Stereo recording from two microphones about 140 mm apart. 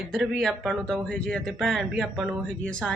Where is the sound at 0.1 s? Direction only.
Centre (ahead or behind).